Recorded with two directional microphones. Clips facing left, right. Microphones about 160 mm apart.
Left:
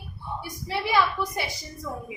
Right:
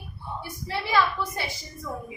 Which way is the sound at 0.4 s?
15° left (ahead or behind).